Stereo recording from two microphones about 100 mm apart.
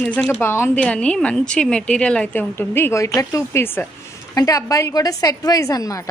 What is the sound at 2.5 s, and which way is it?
A woman's voice, 25° left (ahead or behind).